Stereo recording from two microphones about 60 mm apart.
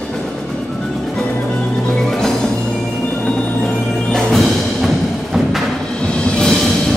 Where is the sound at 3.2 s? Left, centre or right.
Centre.